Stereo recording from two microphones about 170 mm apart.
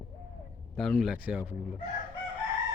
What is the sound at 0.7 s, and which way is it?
Speech, centre (ahead or behind).